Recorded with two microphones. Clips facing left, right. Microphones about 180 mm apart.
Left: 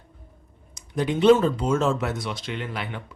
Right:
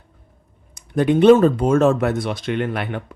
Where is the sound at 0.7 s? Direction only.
60° right (ahead or behind).